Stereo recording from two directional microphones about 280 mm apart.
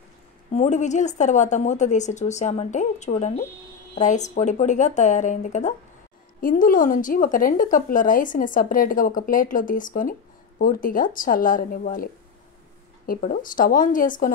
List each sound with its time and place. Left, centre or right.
0.5 s a woman's voice: left